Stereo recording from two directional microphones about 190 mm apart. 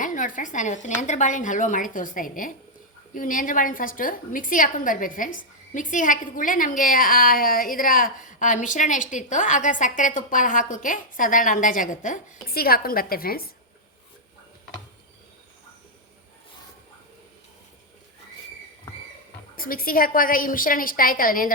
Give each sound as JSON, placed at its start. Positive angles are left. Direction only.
{"t": 0.0, "sound": "a woman's voice", "side_deg": 45}
{"t": 19.5, "sound": "a woman's voice", "side_deg": 50}